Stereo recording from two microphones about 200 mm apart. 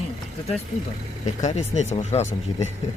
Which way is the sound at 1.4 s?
35° left (ahead or behind).